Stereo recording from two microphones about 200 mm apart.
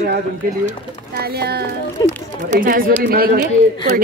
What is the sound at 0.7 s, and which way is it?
Speech, 50° right (ahead or behind).